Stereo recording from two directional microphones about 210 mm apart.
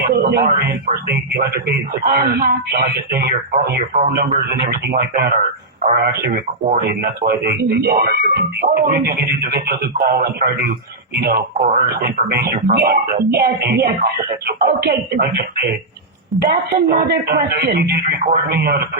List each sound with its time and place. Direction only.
0.0 s a sound: 50° right (ahead or behind)
1.0 s speech: 50° right (ahead or behind)
11.6 s speech: 40° right (ahead or behind)